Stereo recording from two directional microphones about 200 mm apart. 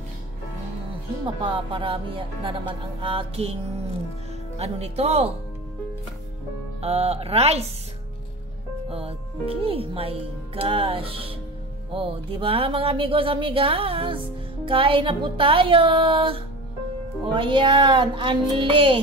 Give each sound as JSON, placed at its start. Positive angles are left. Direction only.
{"t": 1.2, "sound": "speech", "side_deg": -25}
{"t": 4.6, "sound": "a woman's voice", "side_deg": -30}
{"t": 6.8, "sound": "a woman's voice", "side_deg": -30}
{"t": 8.8, "sound": "speech", "side_deg": -30}